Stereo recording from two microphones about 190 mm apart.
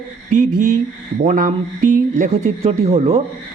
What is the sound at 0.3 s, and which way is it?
Speech, 45° right (ahead or behind).